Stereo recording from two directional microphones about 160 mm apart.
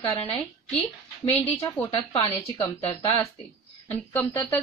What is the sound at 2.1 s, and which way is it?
Speech, 30° left (ahead or behind).